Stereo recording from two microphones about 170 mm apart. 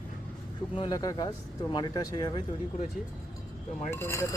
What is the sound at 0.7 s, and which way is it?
Speech, 25° left (ahead or behind).